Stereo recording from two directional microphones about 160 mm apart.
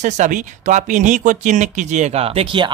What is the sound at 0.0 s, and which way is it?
Speech, 50° right (ahead or behind).